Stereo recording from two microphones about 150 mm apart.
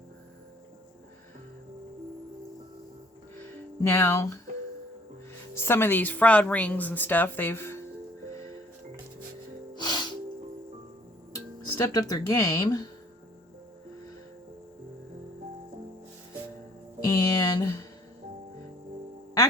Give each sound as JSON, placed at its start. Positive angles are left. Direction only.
{"t": 3.8, "sound": "speech", "side_deg": 15}
{"t": 5.5, "sound": "a woman's voice", "side_deg": 15}
{"t": 9.7, "sound": "music", "side_deg": 30}
{"t": 11.6, "sound": "speech", "side_deg": 25}
{"t": 17.1, "sound": "music", "side_deg": 25}